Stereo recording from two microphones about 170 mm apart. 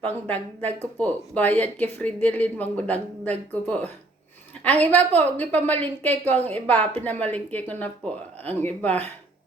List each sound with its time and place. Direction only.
0.0 s speech: 10° left (ahead or behind)